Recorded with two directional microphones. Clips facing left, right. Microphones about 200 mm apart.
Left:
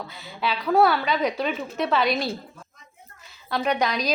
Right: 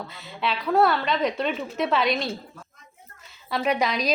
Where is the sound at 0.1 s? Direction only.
Centre (ahead or behind).